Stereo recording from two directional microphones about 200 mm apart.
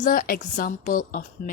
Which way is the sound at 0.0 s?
45° left (ahead or behind).